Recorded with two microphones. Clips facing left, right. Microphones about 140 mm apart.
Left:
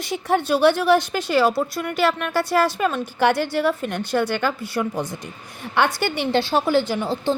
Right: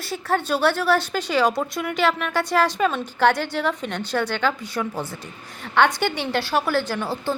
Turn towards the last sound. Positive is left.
turn(degrees=20)  # may be behind; listen again after turning